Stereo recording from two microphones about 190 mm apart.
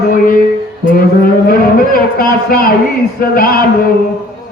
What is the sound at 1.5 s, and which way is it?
A man's voice, 50° left (ahead or behind).